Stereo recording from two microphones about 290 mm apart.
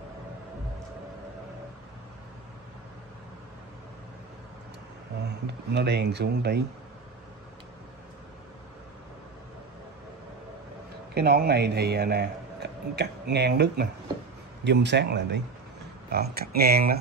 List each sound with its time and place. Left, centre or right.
5.5 s a man's voice: right
11.1 s a man's voice: right